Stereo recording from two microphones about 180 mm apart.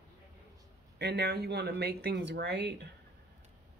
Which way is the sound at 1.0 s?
65° right (ahead or behind).